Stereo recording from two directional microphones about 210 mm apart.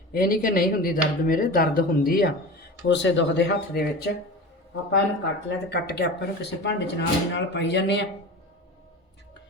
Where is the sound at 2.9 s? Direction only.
60° left (ahead or behind).